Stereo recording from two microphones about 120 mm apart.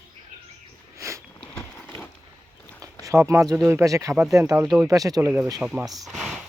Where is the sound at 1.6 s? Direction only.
15° left (ahead or behind).